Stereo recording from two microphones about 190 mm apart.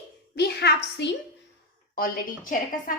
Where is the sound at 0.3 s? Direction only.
60° left (ahead or behind).